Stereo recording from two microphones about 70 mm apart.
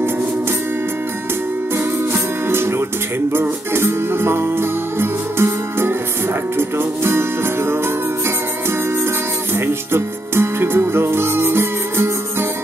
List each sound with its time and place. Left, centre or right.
2.1 s music: right
9.6 s music: right